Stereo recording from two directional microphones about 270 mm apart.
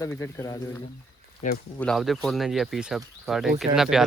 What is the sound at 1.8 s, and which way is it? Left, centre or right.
Speech, centre.